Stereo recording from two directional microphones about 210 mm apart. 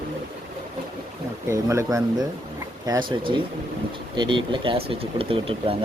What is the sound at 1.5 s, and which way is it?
Speech, 15° right (ahead or behind).